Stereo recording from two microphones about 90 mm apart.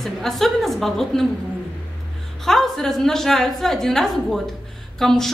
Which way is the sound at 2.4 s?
5° left (ahead or behind).